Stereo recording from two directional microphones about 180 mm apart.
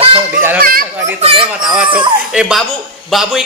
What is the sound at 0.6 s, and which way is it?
Speech, 55° right (ahead or behind).